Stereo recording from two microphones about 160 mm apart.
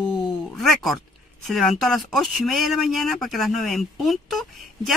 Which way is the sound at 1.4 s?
Centre (ahead or behind).